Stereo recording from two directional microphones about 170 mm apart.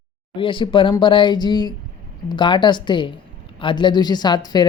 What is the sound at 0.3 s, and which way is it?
Speech, 30° left (ahead or behind).